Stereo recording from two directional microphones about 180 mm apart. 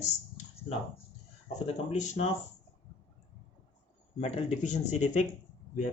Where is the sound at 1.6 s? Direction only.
40° left (ahead or behind).